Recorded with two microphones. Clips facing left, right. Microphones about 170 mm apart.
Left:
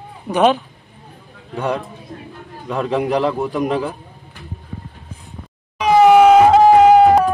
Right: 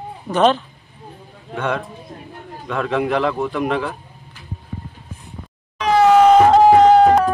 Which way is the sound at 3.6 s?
35° left (ahead or behind).